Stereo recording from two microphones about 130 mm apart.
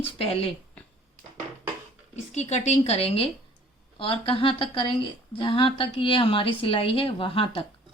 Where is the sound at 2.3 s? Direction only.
60° left (ahead or behind); by 7.6 s 45° left (ahead or behind).